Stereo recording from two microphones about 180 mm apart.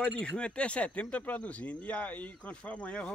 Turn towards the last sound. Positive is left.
turn(degrees=5)  # may be behind; listen again after turning